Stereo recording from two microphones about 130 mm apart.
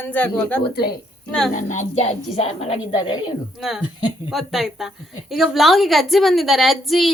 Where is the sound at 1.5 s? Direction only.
65° left (ahead or behind); by 2.7 s 50° left (ahead or behind).